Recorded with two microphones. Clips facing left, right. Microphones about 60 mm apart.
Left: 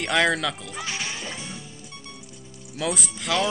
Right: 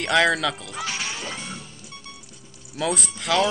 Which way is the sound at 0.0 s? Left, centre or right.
Centre.